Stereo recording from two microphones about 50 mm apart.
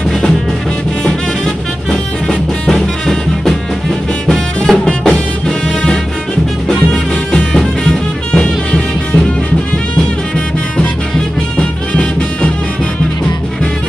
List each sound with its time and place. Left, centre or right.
1.9 s music: centre
6.9 s music: centre
11.5 s music: left